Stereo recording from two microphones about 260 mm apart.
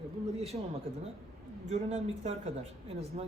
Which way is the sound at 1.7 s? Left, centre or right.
Right.